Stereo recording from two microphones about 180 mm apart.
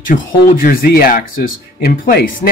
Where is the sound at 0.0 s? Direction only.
50° left (ahead or behind).